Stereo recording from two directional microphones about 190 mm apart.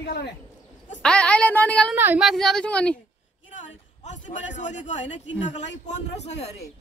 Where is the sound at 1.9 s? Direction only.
5° right (ahead or behind).